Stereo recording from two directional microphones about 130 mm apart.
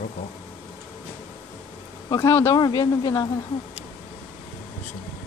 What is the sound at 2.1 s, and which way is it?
Speech, 20° left (ahead or behind).